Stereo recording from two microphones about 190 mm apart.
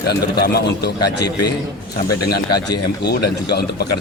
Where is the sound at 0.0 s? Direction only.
55° left (ahead or behind).